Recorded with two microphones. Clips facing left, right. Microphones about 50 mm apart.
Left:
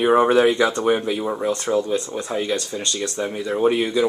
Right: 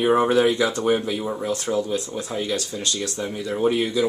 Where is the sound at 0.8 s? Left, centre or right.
Centre.